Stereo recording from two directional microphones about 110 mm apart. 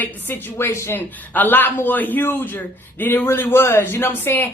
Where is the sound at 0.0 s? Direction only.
20° left (ahead or behind).